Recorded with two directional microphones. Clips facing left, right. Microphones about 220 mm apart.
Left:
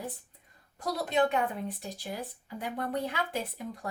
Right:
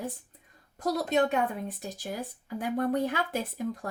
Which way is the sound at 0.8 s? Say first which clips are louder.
Right 2 dB; 45° right (ahead or behind).